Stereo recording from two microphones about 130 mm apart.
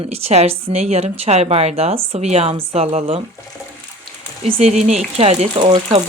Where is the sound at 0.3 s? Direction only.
55° right (ahead or behind).